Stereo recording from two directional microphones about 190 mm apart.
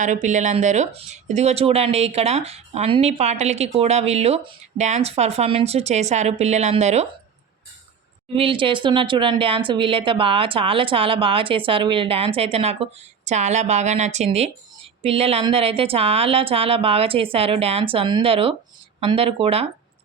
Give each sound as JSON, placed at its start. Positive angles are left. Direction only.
{"t": 0.0, "sound": "speech", "side_deg": -40}
{"t": 8.4, "sound": "speech", "side_deg": -30}